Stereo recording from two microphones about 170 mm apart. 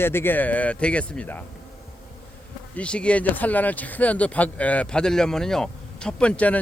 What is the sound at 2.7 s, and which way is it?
Speech, 5° left (ahead or behind).